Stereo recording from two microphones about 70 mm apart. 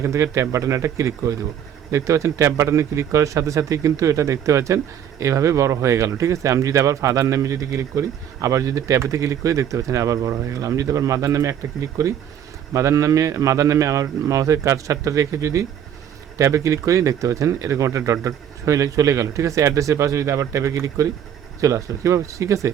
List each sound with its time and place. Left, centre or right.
0.0 s speech: right